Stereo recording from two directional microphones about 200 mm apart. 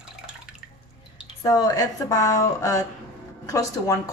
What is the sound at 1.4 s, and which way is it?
Speech, 20° left (ahead or behind).